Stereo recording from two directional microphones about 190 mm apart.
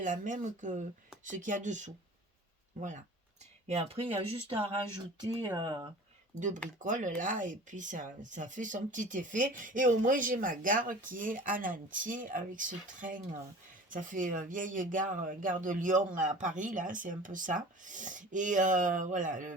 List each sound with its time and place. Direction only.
0.0 s speech: 40° right (ahead or behind)
3.7 s speech: 30° right (ahead or behind)
6.3 s speech: 40° right (ahead or behind)